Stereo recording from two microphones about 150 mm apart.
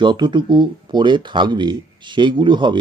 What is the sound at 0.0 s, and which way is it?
Speech, 30° right (ahead or behind).